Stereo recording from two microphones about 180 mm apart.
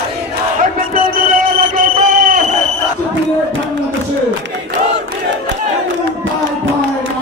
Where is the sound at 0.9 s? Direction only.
50° right (ahead or behind).